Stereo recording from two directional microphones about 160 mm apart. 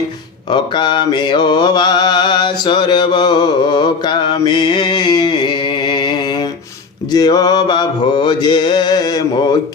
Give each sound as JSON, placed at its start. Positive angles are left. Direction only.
{"t": 0.5, "sound": "mantra", "side_deg": 30}